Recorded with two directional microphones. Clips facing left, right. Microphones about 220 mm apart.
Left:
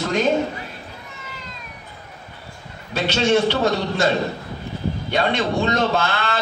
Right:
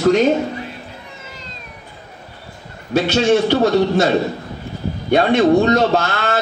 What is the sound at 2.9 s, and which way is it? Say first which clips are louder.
A man's voice: right 4 dB; 50° right (ahead or behind).